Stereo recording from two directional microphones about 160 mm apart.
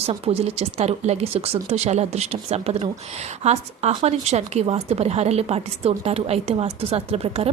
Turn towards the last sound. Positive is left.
turn(degrees=-40)  # may be behind; listen again after turning